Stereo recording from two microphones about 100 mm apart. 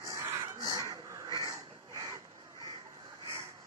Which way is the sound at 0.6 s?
35° right (ahead or behind).